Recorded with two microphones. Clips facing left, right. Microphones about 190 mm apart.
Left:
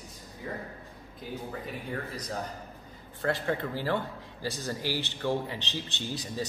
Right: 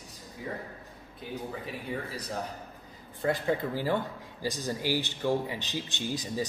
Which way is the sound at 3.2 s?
15° right (ahead or behind).